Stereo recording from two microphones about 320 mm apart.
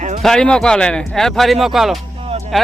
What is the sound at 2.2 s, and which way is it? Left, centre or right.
Music, centre.